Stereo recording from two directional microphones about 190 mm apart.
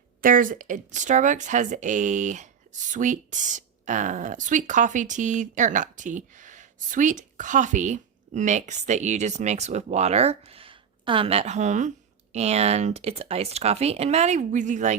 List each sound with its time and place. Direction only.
0.2 s speech: 45° right (ahead or behind)